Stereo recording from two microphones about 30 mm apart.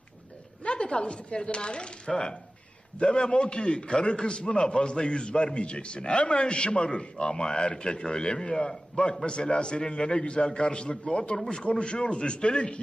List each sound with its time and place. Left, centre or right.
0.6 s a man's voice: left